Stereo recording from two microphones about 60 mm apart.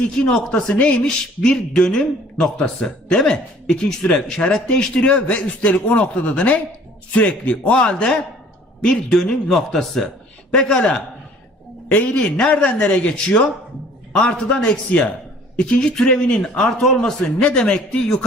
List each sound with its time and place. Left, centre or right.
0.0 s a man's voice: centre